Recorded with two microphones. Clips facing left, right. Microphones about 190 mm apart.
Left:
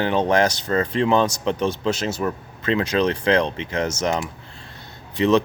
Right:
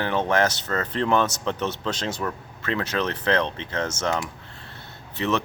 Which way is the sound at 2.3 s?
20° left (ahead or behind).